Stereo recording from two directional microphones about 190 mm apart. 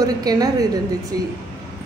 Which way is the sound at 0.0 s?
20° right (ahead or behind).